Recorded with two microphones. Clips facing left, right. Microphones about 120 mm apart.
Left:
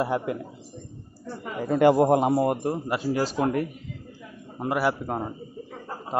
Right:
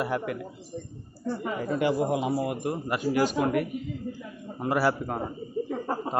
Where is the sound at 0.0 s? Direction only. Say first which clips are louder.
Left 3 dB; 25° left (ahead or behind).